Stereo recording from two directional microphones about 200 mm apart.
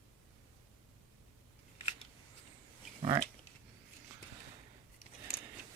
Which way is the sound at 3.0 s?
25° right (ahead or behind).